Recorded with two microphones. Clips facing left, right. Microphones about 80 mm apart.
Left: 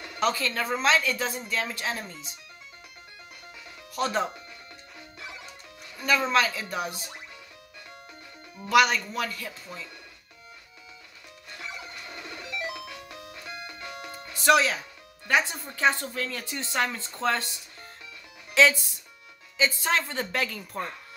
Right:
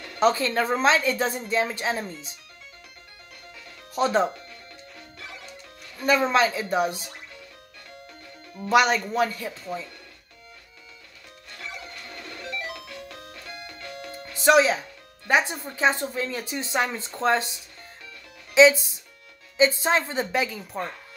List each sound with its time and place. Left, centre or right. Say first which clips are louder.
0.2 s speech: right 5 dB; right
3.9 s speech: right 5 dB; right
6.0 s speech: right 3 dB; right
8.5 s speech: right 2 dB; right
11.5 s music: right 1 dB; centre
14.3 s speech: right 3 dB; right
18.5 s speech: right 5 dB; centre